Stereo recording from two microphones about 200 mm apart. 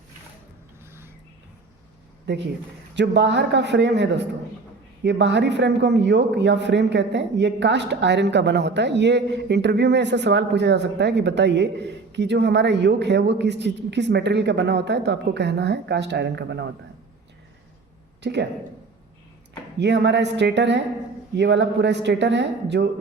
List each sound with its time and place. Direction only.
2.2 s a man's voice: 60° right (ahead or behind)
18.2 s speech: 60° right (ahead or behind)
19.8 s a man's voice: 60° right (ahead or behind)